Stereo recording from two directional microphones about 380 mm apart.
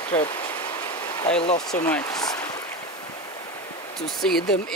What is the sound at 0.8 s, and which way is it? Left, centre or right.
Vehicle, centre.